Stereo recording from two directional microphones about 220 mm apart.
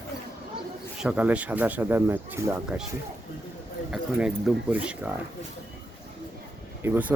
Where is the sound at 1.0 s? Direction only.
5° right (ahead or behind).